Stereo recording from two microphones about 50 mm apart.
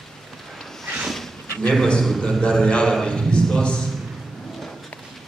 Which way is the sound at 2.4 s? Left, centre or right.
Centre.